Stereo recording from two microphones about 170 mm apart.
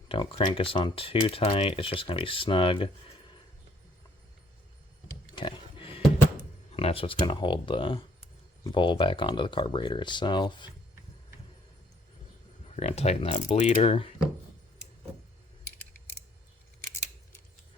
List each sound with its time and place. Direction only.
0.1 s speech: 30° left (ahead or behind)
5.4 s a sound: 30° left (ahead or behind)
6.7 s speech: 35° left (ahead or behind)
12.7 s speech: 40° left (ahead or behind)